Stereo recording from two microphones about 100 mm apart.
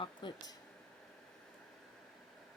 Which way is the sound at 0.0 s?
50° left (ahead or behind).